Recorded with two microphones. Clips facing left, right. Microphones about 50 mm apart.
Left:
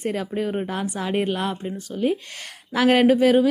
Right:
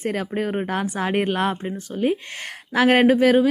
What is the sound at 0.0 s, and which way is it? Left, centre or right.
Speech, right.